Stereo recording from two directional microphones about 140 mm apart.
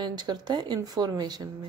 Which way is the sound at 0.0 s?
30° right (ahead or behind).